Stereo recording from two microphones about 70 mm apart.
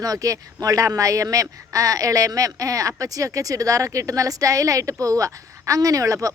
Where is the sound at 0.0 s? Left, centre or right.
Right.